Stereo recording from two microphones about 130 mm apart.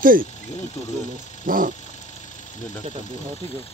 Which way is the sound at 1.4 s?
90° right.